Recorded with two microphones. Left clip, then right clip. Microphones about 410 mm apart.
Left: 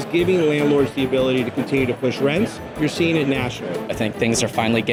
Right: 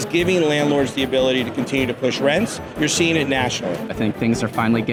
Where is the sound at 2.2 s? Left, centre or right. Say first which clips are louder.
Right 2 dB; right.